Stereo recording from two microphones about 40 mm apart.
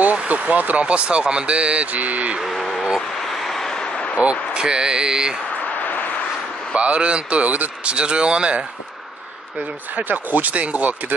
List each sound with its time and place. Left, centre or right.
0.0 s vehicle: right
0.8 s speech: right
2.4 s speech: centre
4.2 s speech: right
5.8 s vehicle: left
6.7 s speech: right
7.8 s speech: right
9.9 s speech: right